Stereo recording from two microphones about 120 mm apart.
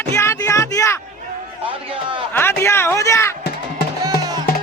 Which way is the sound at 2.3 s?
20° left (ahead or behind).